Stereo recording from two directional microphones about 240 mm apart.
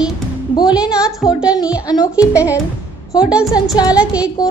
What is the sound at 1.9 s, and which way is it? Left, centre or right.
Music, centre.